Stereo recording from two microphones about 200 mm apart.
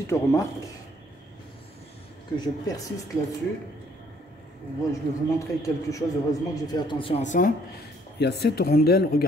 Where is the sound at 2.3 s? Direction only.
15° left (ahead or behind).